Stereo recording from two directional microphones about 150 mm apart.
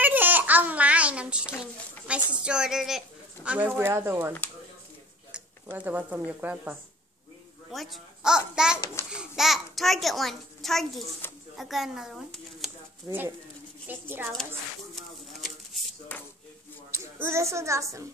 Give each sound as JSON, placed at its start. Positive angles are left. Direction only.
{"t": 0.0, "sound": "babbling", "side_deg": -10}
{"t": 1.6, "sound": "a child's voice", "side_deg": -5}
{"t": 5.3, "sound": "speech", "side_deg": -10}
{"t": 7.7, "sound": "a child's voice", "side_deg": 0}
{"t": 13.1, "sound": "a child's voice", "side_deg": -20}
{"t": 15.0, "sound": "a sound", "side_deg": 0}
{"t": 17.2, "sound": "a child's voice", "side_deg": -20}